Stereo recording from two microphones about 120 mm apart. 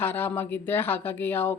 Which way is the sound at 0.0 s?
15° left (ahead or behind).